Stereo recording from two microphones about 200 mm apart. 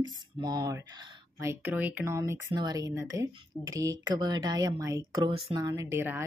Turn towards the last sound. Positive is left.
turn(degrees=-10)  # may be behind; listen again after turning